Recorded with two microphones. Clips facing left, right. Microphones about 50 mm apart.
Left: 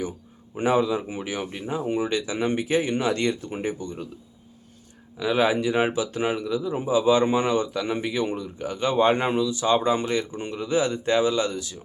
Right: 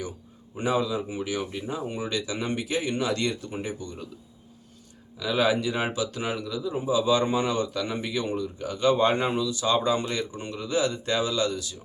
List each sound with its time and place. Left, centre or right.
0.5 s speech: left
5.2 s speech: left